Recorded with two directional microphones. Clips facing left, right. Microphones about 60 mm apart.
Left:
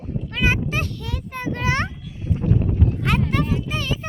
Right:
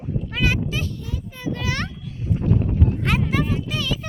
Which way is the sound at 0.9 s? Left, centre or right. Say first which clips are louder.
Left 1 dB; left.